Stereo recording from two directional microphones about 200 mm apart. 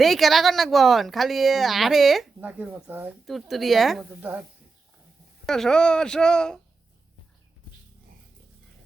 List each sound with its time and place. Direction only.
0.0 s speech: centre (ahead or behind)
5.5 s speech: 5° left (ahead or behind)